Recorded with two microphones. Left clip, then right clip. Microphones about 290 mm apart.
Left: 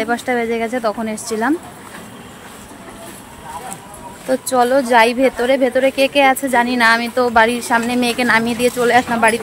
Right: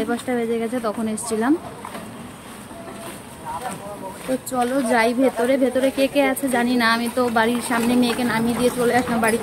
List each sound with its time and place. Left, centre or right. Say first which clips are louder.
0.0 s speech: left 5 dB; centre
4.5 s speech: left 7 dB; centre